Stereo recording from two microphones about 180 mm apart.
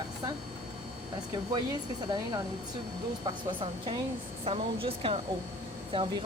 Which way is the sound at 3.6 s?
30° right (ahead or behind).